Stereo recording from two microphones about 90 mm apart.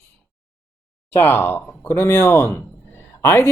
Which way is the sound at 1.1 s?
25° left (ahead or behind).